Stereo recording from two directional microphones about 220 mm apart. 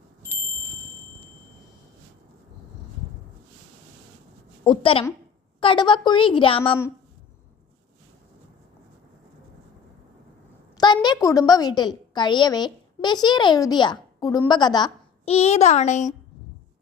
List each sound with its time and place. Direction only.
4.6 s a woman's voice: 25° left (ahead or behind)
10.8 s a woman's voice: 20° left (ahead or behind)